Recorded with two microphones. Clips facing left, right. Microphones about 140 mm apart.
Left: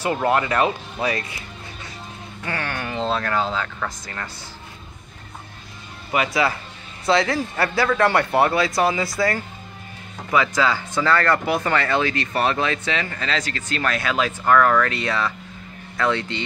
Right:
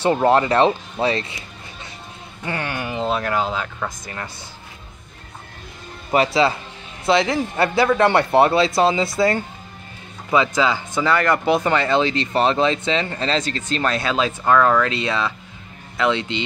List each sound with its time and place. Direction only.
0.0 s speech: 30° right (ahead or behind)
2.4 s speech: 20° right (ahead or behind)
6.1 s speech: 30° right (ahead or behind)